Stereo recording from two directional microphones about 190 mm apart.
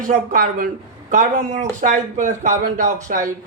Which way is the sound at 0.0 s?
45° right (ahead or behind).